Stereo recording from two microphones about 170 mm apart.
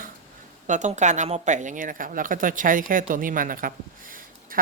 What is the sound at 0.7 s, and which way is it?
Speech, 45° right (ahead or behind).